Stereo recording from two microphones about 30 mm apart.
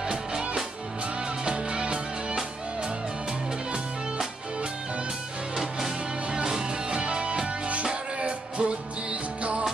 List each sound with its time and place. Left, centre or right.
1.4 s music: right
6.9 s music: right